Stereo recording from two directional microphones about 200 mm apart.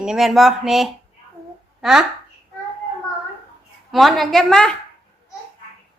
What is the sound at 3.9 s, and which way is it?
Speech, centre (ahead or behind).